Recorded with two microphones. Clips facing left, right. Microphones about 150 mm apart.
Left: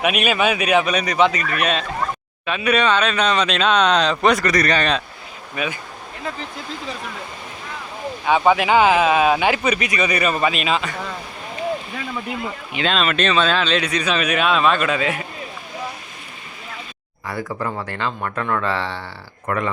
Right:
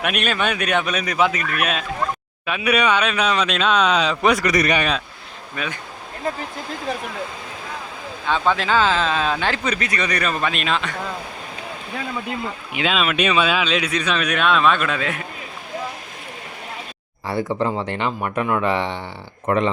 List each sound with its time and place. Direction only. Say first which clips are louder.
0.0 s speech: left 3 dB; 5° left (ahead or behind); by 4.8 s 20° right (ahead or behind)
4.8 s speech: left 2 dB; 5° right (ahead or behind)
5.5 s speech: left 3 dB; 5° left (ahead or behind)
8.2 s speech: left 4 dB; 15° left (ahead or behind)
12.7 s speech: left 1 dB; 5° right (ahead or behind)
17.2 s speech: right 4 dB; 25° right (ahead or behind)